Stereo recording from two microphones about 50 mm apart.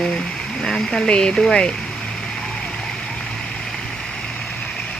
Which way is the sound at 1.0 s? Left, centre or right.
Centre.